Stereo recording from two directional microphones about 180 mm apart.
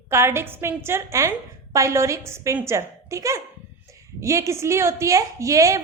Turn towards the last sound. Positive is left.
turn(degrees=-15)  # may be behind; listen again after turning